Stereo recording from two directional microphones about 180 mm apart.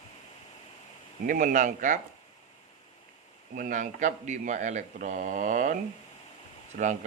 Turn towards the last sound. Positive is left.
turn(degrees=-50)  # may be behind; listen again after turning